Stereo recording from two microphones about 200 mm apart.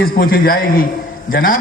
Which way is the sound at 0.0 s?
45° left (ahead or behind).